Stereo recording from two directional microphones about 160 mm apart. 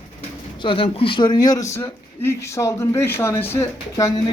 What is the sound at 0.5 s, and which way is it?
Speech, 35° left (ahead or behind).